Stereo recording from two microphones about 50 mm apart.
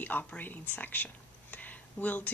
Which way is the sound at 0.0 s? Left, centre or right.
Left.